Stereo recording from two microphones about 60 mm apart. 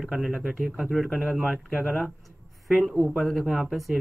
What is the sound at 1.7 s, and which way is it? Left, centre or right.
Speech, centre.